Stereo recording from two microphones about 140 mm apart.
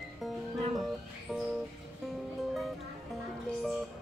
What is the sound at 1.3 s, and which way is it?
Music, centre (ahead or behind).